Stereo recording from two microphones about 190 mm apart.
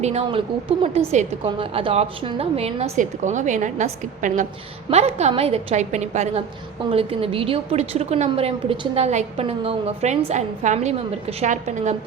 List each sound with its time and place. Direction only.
0.0 s a woman's voice: 35° right (ahead or behind)